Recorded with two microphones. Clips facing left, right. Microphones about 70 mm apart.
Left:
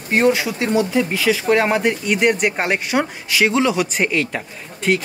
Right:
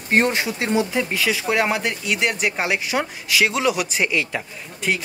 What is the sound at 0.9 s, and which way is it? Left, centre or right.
Speech, centre.